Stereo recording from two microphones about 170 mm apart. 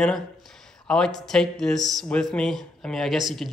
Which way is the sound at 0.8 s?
5° left (ahead or behind).